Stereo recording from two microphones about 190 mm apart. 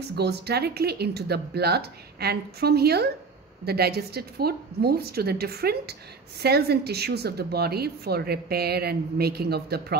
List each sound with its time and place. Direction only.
0.1 s speech: 60° right (ahead or behind)